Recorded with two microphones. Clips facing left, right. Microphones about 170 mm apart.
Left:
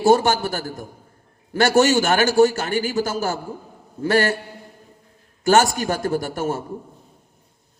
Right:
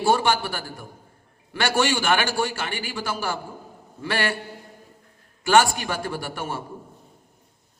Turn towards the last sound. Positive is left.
turn(degrees=40)  # may be behind; listen again after turning